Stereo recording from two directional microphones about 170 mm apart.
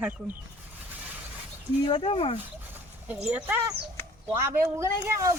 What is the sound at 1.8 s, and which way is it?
Speech, 30° left (ahead or behind).